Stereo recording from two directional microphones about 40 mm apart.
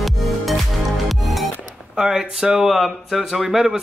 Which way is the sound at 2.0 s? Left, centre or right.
Centre.